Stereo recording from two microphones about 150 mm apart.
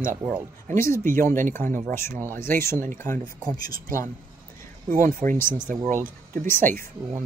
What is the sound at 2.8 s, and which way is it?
Speech, 60° right (ahead or behind).